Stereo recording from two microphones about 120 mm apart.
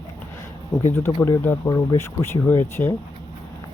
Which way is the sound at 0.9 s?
20° left (ahead or behind).